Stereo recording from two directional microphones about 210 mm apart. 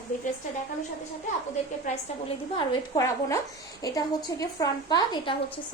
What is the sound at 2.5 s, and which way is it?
Speech, 20° left (ahead or behind).